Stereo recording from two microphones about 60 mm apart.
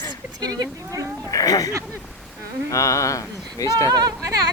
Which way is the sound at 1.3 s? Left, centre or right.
Left.